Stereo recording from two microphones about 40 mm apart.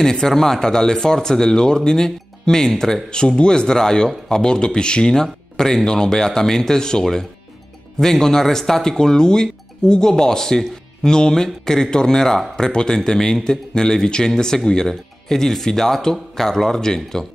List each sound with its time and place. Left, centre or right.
0.0 s speech: centre